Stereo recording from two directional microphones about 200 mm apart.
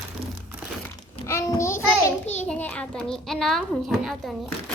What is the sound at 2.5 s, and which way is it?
A child's voice, 5° left (ahead or behind).